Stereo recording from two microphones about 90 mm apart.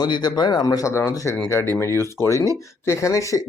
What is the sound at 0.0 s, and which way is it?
Speech, 50° left (ahead or behind).